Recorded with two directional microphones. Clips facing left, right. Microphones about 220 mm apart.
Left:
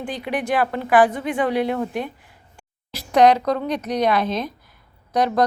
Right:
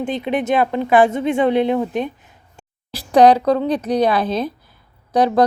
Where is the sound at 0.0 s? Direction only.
25° right (ahead or behind).